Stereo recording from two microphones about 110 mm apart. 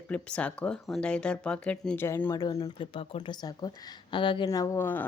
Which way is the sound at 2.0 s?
25° left (ahead or behind).